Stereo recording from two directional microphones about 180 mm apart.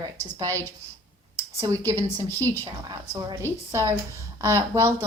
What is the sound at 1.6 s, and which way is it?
A woman's voice, 15° right (ahead or behind).